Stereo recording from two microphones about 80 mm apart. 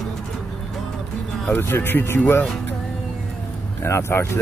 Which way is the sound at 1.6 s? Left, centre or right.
Left.